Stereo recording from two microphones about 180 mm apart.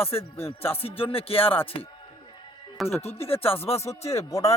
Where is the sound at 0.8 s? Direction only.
30° left (ahead or behind).